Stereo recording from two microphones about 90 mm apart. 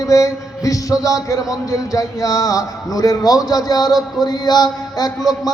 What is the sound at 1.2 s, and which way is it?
Speech, 40° left (ahead or behind).